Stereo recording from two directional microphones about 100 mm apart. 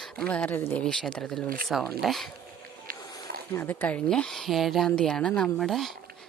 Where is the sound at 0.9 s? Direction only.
5° left (ahead or behind).